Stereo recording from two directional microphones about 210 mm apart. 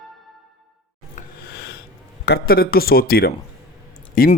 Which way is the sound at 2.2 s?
50° left (ahead or behind).